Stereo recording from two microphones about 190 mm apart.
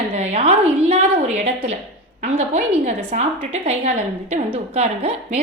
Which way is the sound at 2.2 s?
35° right (ahead or behind).